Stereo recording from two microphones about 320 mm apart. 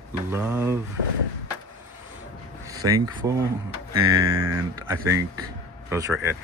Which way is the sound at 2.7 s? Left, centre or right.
Centre.